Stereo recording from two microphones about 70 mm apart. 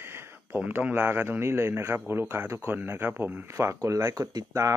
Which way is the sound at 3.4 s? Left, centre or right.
Right.